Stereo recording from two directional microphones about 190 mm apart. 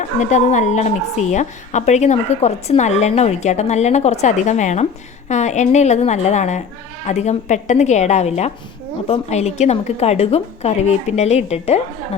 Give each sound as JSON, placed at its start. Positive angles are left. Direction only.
{"t": 0.2, "sound": "a woman's voice", "side_deg": 40}